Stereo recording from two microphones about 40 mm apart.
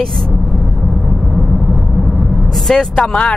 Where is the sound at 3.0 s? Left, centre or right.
Left.